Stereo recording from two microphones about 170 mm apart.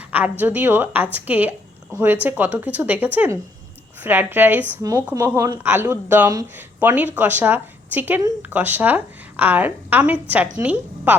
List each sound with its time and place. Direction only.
0.1 s a woman's voice: 10° right (ahead or behind)